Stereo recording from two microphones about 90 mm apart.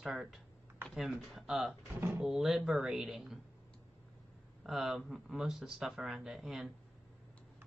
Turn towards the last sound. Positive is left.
turn(degrees=-5)  # may be behind; listen again after turning